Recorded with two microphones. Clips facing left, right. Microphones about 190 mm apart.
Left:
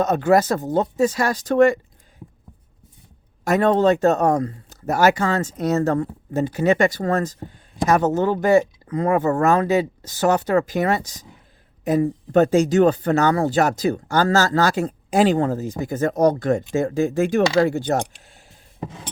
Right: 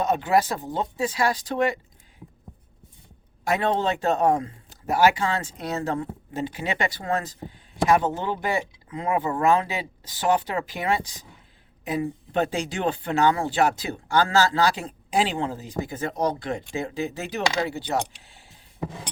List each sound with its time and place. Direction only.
0.0 s speech: 45° left (ahead or behind)
3.4 s speech: 45° left (ahead or behind)